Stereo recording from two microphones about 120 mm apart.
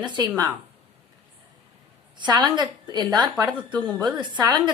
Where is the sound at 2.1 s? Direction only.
40° right (ahead or behind).